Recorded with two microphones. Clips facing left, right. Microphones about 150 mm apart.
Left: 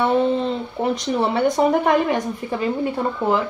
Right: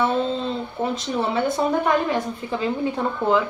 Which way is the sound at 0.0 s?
20° left (ahead or behind).